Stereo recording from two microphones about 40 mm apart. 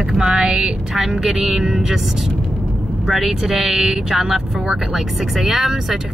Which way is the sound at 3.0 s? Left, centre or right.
Centre.